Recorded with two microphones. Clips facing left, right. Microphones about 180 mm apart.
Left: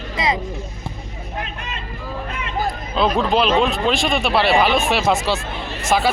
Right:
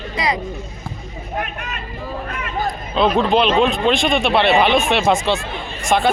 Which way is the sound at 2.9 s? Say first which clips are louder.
Right 2 dB; centre (ahead or behind).